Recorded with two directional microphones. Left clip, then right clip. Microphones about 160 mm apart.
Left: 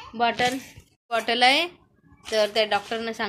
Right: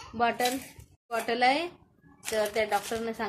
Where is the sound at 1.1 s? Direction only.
15° left (ahead or behind).